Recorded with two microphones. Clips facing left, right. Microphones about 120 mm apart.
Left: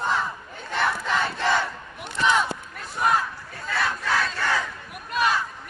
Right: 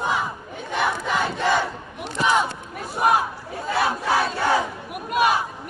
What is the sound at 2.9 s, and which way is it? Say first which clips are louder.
Battle cry: right 3 dB; 15° right (ahead or behind).